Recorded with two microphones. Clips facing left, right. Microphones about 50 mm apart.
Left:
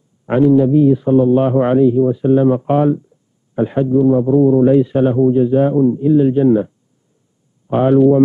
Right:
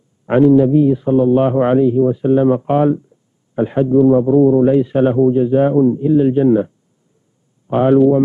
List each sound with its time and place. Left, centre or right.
0.3 s a man's voice: centre
4.9 s a man's voice: centre